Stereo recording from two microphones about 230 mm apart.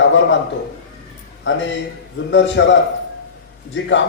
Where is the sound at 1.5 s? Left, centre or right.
Left.